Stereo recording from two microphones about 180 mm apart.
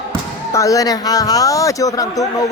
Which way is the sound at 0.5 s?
20° left (ahead or behind).